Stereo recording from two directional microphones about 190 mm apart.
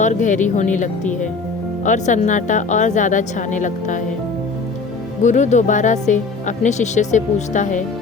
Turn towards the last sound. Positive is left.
turn(degrees=40)  # may be behind; listen again after turning